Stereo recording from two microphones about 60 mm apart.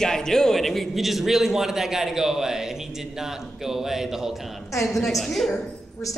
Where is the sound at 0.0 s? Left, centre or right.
Centre.